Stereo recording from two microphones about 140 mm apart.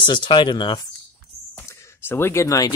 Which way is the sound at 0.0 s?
35° left (ahead or behind).